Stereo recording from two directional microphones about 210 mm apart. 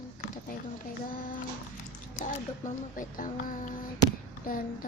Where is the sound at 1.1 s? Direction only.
40° left (ahead or behind).